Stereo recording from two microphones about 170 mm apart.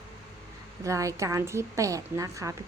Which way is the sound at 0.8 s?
20° right (ahead or behind).